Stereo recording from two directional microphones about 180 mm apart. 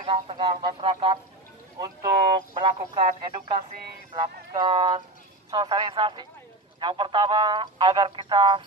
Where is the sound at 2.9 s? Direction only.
25° right (ahead or behind).